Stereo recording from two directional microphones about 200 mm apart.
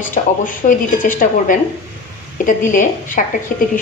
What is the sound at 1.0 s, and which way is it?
A woman's voice, 45° left (ahead or behind).